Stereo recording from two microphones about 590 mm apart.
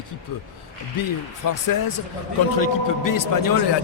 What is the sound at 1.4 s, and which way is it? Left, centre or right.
Speech, left.